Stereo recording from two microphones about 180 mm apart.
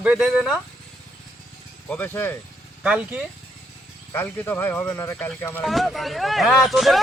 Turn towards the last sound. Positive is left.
turn(degrees=0)  # may be behind; listen again after turning